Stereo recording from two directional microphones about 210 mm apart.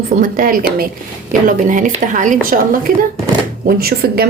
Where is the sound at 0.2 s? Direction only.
40° right (ahead or behind).